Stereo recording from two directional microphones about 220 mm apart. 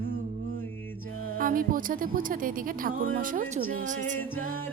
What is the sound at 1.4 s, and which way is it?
Music, 40° right (ahead or behind).